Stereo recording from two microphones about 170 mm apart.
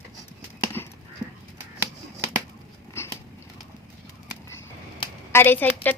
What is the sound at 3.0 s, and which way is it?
Biting, 15° left (ahead or behind).